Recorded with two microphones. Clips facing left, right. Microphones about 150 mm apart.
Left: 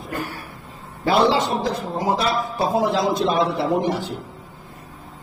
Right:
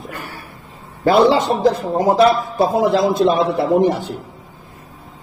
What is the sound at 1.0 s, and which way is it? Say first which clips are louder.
Speech: right 5 dB; 50° right (ahead or behind).